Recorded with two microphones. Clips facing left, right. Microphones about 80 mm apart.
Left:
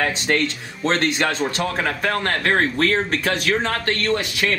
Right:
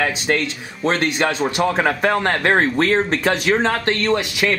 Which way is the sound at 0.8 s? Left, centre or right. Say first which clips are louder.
Right 1 dB; centre.